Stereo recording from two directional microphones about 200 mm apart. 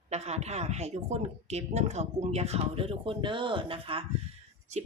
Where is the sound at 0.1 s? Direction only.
35° right (ahead or behind).